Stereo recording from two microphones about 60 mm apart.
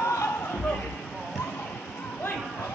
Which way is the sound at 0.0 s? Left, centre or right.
Left.